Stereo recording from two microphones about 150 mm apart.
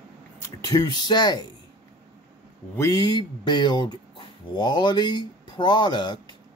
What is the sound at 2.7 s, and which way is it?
Speech, 25° left (ahead or behind).